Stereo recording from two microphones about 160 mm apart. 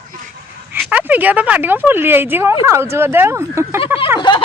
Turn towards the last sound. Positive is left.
turn(degrees=30)  # may be behind; listen again after turning